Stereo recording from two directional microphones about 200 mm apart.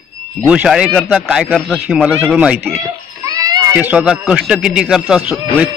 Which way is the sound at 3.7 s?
10° right (ahead or behind).